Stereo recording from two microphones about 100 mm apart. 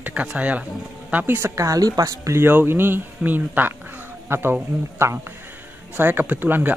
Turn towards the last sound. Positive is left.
turn(degrees=-20)  # may be behind; listen again after turning